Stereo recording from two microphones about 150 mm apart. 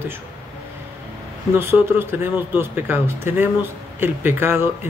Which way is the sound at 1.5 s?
15° right (ahead or behind).